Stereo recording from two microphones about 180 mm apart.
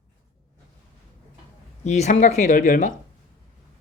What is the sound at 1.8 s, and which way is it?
Speech, 40° left (ahead or behind).